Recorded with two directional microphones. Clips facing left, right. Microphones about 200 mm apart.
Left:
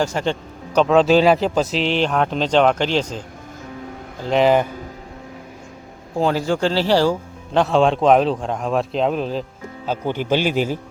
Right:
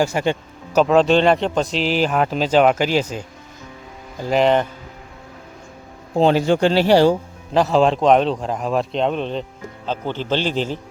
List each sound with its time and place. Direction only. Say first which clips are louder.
0.0 s a man's voice: right 2 dB; 10° right (ahead or behind)
4.3 s a man's voice: left 1 dB; centre (ahead or behind)
6.1 s speech: right 4 dB; 25° right (ahead or behind)
7.5 s a man's voice: even; centre (ahead or behind)